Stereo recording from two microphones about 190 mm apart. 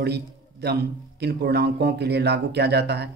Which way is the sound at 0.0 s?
60° right (ahead or behind).